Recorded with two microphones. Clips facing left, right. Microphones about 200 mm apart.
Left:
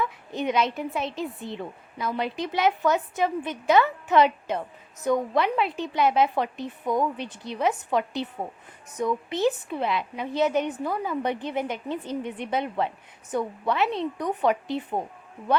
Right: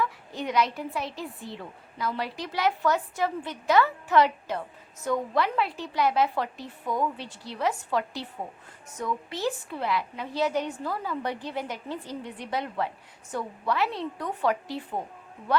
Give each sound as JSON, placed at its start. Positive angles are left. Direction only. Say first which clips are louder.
{"t": 0.0, "sound": "a woman's voice", "louder": "left 3 dB", "side_deg": 20}